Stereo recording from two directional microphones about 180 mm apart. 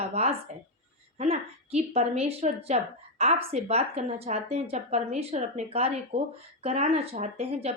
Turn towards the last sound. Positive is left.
turn(degrees=-35)  # may be behind; listen again after turning